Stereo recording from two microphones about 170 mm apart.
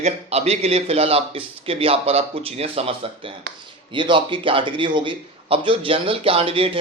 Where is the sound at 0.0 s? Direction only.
40° right (ahead or behind).